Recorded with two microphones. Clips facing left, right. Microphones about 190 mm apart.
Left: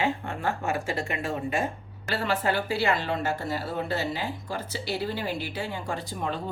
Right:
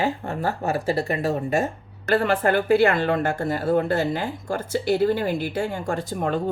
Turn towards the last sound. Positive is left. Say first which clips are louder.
# right 7 dB
turn(degrees=-50)  # may be behind; listen again after turning